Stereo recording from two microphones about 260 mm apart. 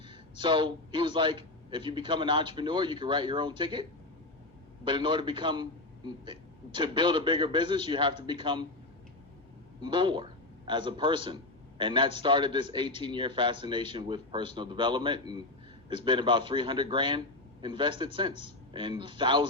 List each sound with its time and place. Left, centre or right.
0.1 s a man's voice: centre
4.9 s a man's voice: centre
9.8 s a man's voice: centre